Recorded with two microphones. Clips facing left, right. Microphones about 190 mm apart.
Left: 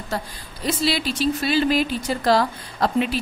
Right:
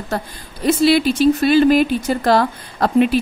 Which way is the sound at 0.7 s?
55° right (ahead or behind).